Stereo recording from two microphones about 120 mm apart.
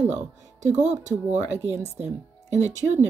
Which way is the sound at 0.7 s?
70° right (ahead or behind).